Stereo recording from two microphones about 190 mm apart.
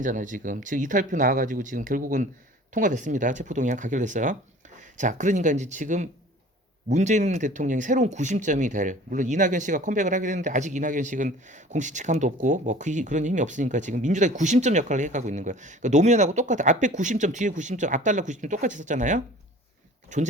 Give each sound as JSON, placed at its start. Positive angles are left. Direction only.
{"t": 0.0, "sound": "speech", "side_deg": -45}